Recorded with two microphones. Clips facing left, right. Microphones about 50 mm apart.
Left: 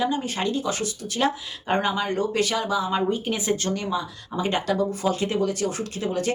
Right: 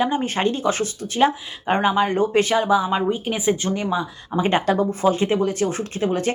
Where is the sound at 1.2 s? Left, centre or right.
Right.